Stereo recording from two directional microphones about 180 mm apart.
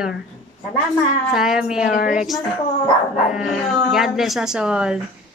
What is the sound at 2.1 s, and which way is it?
Speech, centre (ahead or behind).